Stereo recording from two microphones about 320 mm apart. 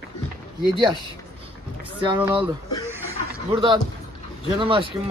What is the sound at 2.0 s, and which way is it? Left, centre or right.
Speech, centre.